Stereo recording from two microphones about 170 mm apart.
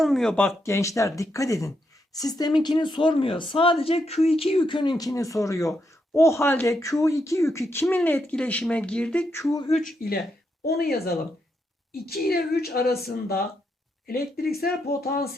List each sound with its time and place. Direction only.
0.0 s speech: centre (ahead or behind)
9.4 s speech: 20° left (ahead or behind)
9.6 s speech: 40° left (ahead or behind)
10.7 s speech: 65° left (ahead or behind)